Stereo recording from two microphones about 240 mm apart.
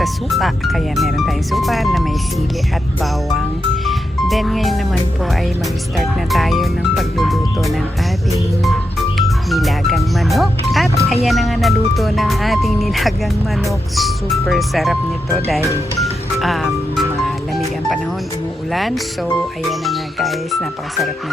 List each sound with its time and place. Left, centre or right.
0.0 s speech: centre
3.8 s music: centre
6.0 s speech: centre
16.0 s music: centre
18.7 s speech: centre